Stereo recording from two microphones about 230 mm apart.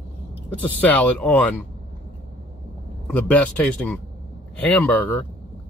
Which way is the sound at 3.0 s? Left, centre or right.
Centre.